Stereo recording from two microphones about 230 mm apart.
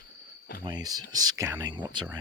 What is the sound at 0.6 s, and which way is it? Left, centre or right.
Speech, centre.